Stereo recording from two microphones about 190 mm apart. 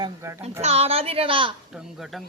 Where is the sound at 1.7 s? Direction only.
5° right (ahead or behind).